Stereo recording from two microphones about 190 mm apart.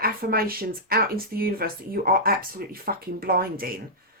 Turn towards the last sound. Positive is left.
turn(degrees=-50)  # may be behind; listen again after turning